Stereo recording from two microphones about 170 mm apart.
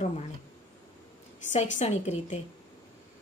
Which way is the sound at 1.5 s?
45° left (ahead or behind).